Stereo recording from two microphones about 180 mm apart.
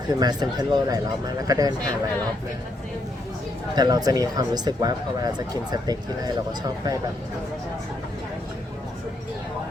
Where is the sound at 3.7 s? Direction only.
20° right (ahead or behind).